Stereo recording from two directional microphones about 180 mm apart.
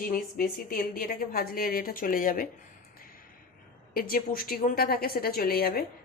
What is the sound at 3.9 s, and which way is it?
A woman's voice, 55° left (ahead or behind).